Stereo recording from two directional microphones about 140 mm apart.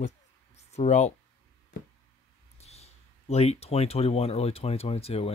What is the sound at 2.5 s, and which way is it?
Speech, 50° left (ahead or behind).